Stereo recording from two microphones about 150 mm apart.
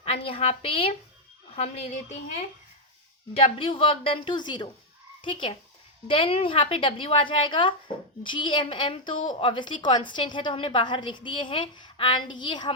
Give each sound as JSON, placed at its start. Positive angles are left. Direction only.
{"t": 0.0, "sound": "a woman's voice", "side_deg": 40}
{"t": 3.3, "sound": "a woman's voice", "side_deg": 40}